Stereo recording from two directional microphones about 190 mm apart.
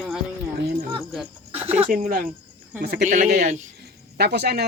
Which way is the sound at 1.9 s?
45° right (ahead or behind).